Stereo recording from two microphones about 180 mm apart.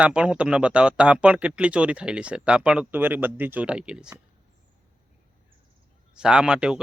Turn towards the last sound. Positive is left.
turn(degrees=-5)  # may be behind; listen again after turning